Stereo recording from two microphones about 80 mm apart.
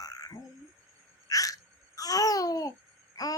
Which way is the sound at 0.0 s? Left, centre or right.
Left.